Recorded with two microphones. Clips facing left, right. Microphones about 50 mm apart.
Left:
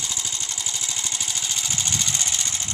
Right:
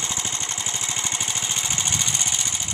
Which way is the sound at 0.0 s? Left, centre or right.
Right.